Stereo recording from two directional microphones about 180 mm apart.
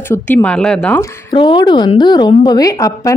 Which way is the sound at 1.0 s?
25° left (ahead or behind).